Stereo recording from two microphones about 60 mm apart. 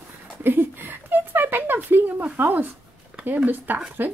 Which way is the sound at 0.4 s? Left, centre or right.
Right.